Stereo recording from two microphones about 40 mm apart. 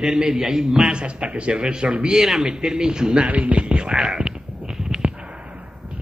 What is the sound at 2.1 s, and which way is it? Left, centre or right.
A man's voice, centre.